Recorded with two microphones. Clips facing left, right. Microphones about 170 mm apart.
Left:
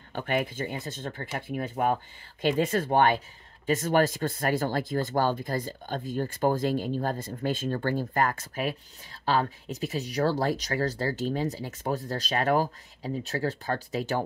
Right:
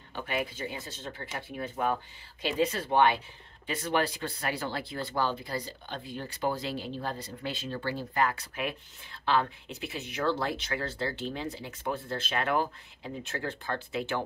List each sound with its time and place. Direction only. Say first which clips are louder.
0.1 s speech: left 5 dB; 50° left (ahead or behind)